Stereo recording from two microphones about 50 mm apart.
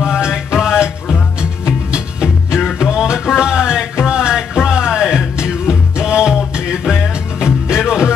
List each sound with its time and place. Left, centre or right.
0.0 s music: centre